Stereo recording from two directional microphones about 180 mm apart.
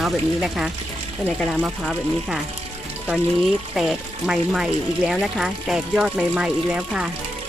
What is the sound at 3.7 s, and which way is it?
Speech, 5° right (ahead or behind).